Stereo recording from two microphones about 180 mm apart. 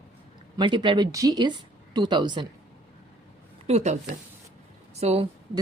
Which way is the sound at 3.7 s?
40° right (ahead or behind).